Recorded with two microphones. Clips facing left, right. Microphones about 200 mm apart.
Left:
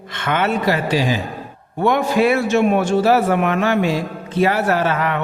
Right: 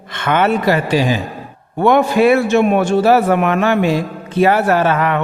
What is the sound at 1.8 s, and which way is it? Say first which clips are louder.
Speech: right 4 dB; 60° right (ahead or behind).